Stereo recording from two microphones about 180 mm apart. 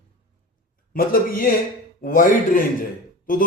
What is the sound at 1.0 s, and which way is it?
A man's voice, 55° left (ahead or behind).